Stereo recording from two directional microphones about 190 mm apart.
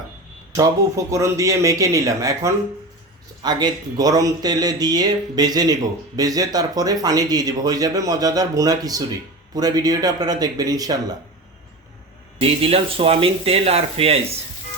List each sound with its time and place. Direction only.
0.5 s speech: 15° right (ahead or behind)
12.4 s speech: 30° right (ahead or behind)